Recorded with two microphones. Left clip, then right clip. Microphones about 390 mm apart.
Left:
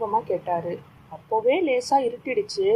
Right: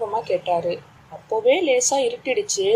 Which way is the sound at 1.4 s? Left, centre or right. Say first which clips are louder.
Right 5 dB; centre.